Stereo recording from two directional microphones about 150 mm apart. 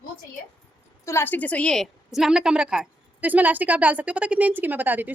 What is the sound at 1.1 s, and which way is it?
A woman's voice, 15° left (ahead or behind).